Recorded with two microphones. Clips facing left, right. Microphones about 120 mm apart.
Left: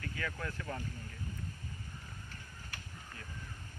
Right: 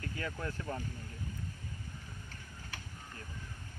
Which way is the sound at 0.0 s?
30° right (ahead or behind).